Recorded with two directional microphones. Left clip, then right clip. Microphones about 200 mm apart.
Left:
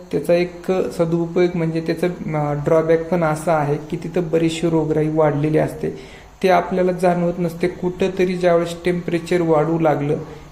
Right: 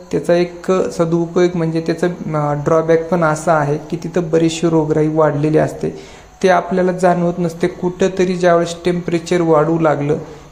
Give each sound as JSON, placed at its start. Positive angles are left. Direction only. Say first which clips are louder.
{"t": 0.1, "sound": "speech", "louder": "right 3 dB", "side_deg": -15}